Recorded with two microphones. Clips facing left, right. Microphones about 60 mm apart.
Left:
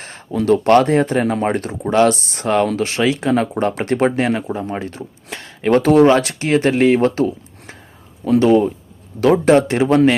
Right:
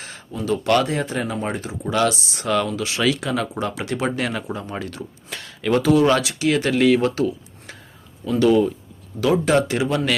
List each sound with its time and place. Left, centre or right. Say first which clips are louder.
0.3 s speech: left 9 dB; left
0.5 s speech: left 7 dB; left
3.0 s speech: left 5 dB; left
4.1 s speech: left 6 dB; left
5.7 s speech: left 5 dB; left
9.2 s speech: left 6 dB; left